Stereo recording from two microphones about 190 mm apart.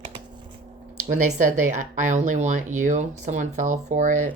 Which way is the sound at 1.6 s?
40° right (ahead or behind).